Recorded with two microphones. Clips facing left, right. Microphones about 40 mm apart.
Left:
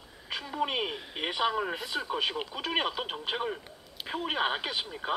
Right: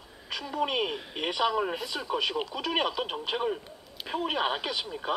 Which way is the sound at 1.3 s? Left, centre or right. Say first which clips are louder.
Right 2 dB; centre.